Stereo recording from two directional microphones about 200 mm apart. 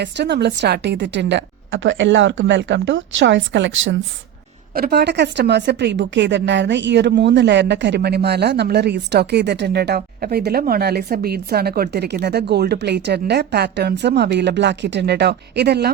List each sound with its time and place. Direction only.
0.0 s a woman's voice: 60° right (ahead or behind)
4.7 s a woman's voice: 50° right (ahead or behind)